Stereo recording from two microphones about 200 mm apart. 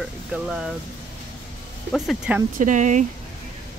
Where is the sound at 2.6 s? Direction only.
40° right (ahead or behind).